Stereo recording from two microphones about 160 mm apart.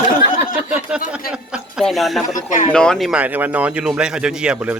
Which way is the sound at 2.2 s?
50° left (ahead or behind).